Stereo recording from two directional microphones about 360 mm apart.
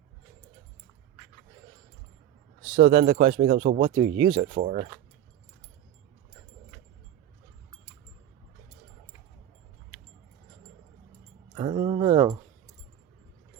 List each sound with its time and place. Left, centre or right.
2.7 s speech: right
11.5 s speech: centre